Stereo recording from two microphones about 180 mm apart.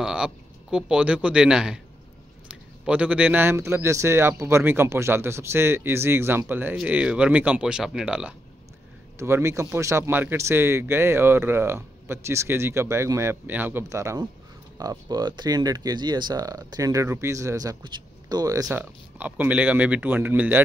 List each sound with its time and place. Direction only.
0.0 s a man's voice: 5° right (ahead or behind)